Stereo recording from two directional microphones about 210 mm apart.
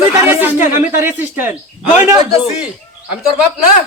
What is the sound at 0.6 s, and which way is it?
Speech, 40° left (ahead or behind).